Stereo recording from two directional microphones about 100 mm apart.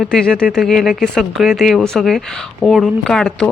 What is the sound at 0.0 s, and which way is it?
Speech, 5° left (ahead or behind).